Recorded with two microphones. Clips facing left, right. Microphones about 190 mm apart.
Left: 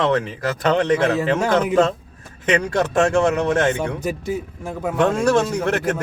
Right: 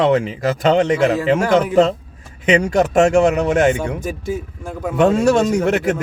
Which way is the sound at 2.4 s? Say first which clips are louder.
Right 4 dB; 20° right (ahead or behind).